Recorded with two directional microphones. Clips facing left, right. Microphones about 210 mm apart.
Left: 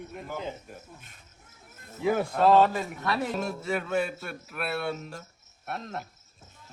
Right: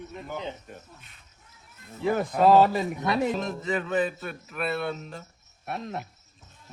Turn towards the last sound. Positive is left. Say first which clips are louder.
# right 2 dB
turn(degrees=0)  # may be behind; listen again after turning